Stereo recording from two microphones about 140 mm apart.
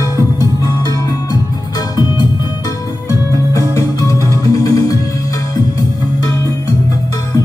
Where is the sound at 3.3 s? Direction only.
25° left (ahead or behind).